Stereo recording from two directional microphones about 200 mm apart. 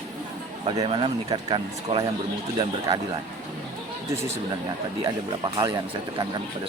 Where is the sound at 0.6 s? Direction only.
25° right (ahead or behind).